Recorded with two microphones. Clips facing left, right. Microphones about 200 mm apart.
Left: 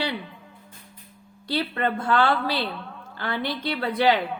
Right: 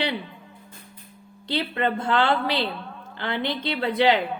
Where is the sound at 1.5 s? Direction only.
20° right (ahead or behind).